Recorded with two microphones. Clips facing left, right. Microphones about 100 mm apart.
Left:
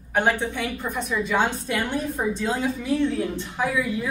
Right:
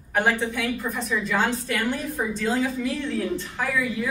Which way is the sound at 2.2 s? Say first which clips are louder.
Right 2 dB; centre (ahead or behind).